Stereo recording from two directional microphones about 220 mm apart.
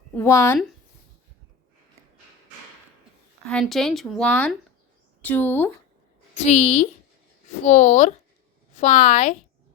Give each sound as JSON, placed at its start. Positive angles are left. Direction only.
{"t": 0.1, "sound": "speech", "side_deg": 10}
{"t": 3.4, "sound": "speech", "side_deg": 0}
{"t": 6.4, "sound": "a woman's voice", "side_deg": 30}